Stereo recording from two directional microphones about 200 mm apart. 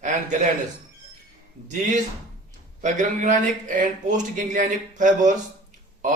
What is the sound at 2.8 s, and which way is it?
Speech, 40° right (ahead or behind).